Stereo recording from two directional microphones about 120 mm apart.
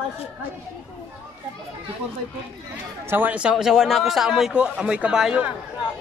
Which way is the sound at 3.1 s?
10° right (ahead or behind).